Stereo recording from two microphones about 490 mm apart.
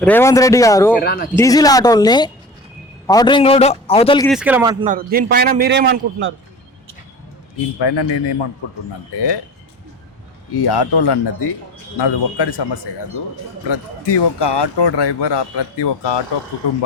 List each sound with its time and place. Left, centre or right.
0.0 s a man's voice: centre
1.0 s speech: centre
1.4 s a man's voice: centre; by 6.3 s right
7.8 s speech: left
10.5 s speech: left